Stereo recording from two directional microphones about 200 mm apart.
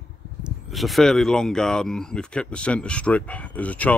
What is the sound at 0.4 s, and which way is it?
Speech, centre (ahead or behind).